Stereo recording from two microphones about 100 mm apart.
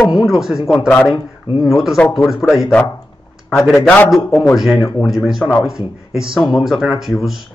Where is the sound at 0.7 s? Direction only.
20° left (ahead or behind).